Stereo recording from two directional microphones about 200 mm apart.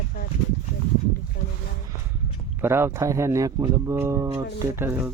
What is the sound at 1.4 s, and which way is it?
Speech, 50° left (ahead or behind).